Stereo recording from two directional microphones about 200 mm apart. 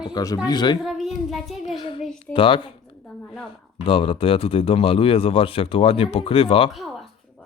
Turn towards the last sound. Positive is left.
turn(degrees=25)  # may be behind; listen again after turning